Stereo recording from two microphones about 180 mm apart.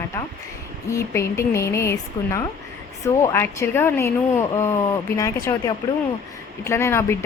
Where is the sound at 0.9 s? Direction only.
15° left (ahead or behind).